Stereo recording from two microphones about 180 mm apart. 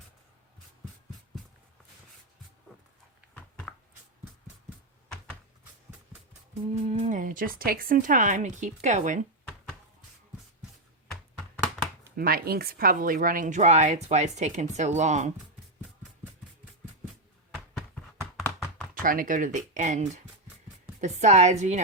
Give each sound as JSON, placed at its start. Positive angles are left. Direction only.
{"t": 3.7, "sound": "a sound", "side_deg": 0}
{"t": 6.5, "sound": "speech", "side_deg": -35}
{"t": 12.1, "sound": "speech", "side_deg": -55}
{"t": 19.0, "sound": "speech", "side_deg": -50}